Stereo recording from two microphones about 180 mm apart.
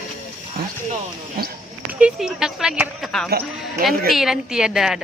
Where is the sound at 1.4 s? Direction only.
55° right (ahead or behind).